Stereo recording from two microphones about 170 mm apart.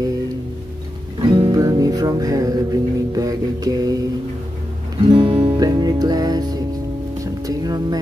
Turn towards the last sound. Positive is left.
turn(degrees=-25)  # may be behind; listen again after turning